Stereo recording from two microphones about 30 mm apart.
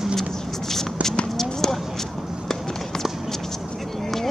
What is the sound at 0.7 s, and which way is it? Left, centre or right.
Shuffle, centre.